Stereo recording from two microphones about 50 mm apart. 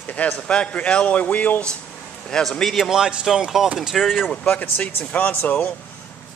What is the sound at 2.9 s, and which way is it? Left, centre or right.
Speech, centre.